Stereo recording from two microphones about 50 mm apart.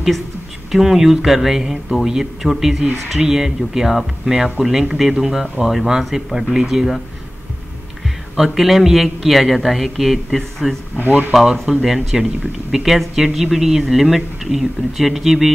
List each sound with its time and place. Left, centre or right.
0.7 s speech: centre
8.4 s speech: centre
11.1 s speech: right
11.3 s speech: centre